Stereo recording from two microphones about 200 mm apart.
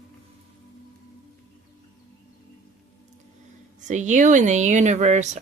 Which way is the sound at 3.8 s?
40° right (ahead or behind).